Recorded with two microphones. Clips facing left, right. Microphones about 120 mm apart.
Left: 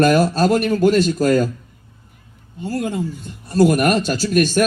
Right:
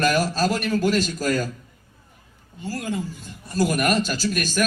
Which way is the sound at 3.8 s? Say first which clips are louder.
Left 4 dB; 60° left (ahead or behind).